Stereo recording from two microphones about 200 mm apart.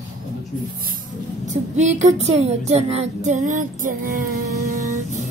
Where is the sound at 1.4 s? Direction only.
35° right (ahead or behind).